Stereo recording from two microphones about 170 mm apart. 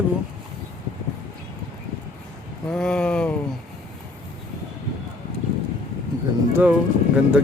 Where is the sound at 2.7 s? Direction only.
5° left (ahead or behind).